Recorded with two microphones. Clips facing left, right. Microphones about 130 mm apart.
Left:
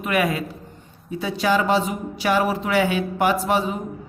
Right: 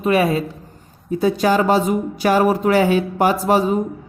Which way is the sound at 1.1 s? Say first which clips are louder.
Right 5 dB; 40° right (ahead or behind).